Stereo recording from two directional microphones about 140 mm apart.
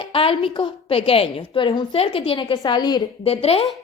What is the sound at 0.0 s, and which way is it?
A woman's voice, 40° left (ahead or behind).